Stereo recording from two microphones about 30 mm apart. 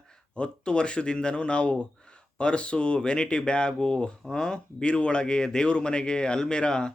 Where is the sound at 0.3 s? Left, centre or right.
Left.